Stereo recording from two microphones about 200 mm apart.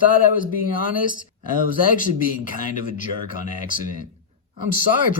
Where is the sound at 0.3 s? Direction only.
45° left (ahead or behind).